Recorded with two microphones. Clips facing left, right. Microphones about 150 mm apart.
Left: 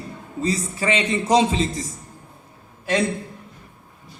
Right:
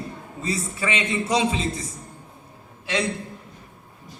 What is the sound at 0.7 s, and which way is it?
A man's voice, 40° left (ahead or behind).